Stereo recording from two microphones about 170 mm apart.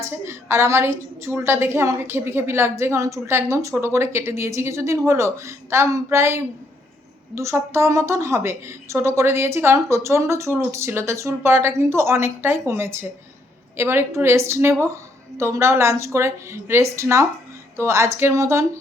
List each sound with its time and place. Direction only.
0.0 s a woman's voice: 15° right (ahead or behind)